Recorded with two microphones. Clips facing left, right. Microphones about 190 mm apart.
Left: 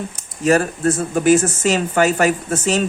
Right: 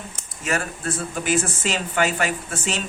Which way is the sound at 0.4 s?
40° left (ahead or behind).